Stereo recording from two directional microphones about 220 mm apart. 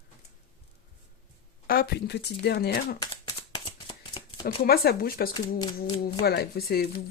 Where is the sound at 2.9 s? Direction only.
20° left (ahead or behind).